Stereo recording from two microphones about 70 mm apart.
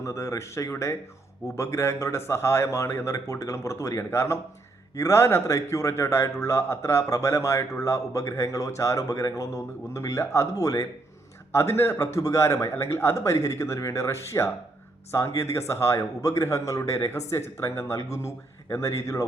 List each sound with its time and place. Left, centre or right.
0.0 s a man's voice: left
11.5 s a man's voice: left